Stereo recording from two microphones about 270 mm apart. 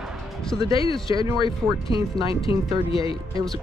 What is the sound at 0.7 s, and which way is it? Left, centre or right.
Speech, centre.